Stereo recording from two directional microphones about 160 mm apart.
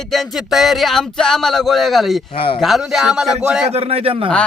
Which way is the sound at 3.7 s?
40° right (ahead or behind).